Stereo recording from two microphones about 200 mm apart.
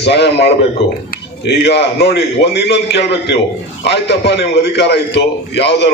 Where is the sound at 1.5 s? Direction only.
55° left (ahead or behind).